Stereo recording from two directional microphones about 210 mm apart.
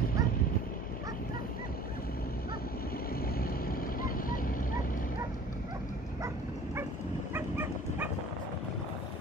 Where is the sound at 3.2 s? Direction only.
45° left (ahead or behind).